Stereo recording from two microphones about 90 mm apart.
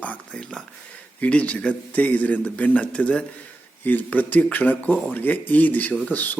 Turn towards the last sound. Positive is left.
turn(degrees=20)  # may be behind; listen again after turning